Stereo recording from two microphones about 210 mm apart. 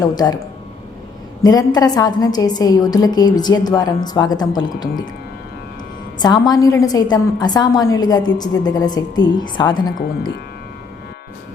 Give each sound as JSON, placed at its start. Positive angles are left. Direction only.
{"t": 0.0, "sound": "a woman's voice", "side_deg": 20}
{"t": 1.4, "sound": "a woman's voice", "side_deg": 20}
{"t": 6.1, "sound": "a woman's voice", "side_deg": 20}